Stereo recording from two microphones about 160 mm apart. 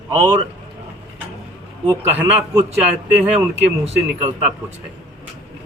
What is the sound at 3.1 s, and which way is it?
Speech, 5° right (ahead or behind).